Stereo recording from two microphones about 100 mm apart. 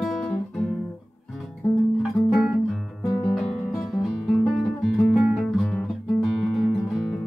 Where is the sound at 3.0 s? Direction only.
35° left (ahead or behind).